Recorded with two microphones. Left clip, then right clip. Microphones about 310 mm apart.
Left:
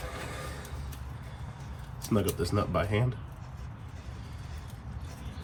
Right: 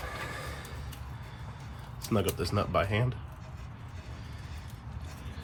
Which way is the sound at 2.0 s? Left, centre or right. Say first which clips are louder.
Left 1 dB; centre.